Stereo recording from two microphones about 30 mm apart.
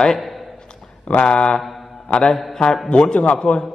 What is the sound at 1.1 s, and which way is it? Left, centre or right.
Speech, left.